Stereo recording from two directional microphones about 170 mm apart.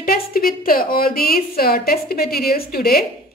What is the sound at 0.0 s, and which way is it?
A woman's voice, 60° left (ahead or behind).